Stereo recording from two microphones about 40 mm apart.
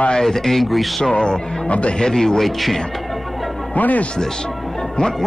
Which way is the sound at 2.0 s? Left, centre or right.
Centre.